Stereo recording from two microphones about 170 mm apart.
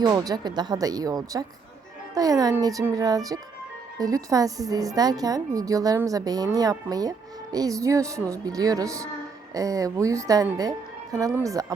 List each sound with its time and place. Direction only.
0.0 s a woman's voice: 20° right (ahead or behind)